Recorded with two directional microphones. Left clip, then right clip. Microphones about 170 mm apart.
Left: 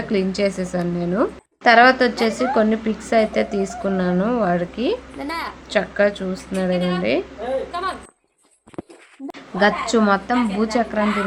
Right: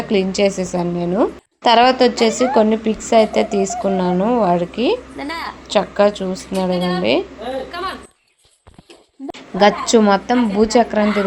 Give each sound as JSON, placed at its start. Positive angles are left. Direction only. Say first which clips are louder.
{"t": 0.1, "sound": "a woman's voice", "louder": "right 5 dB", "side_deg": -10}
{"t": 9.6, "sound": "a woman's voice", "louder": "right 5 dB", "side_deg": -20}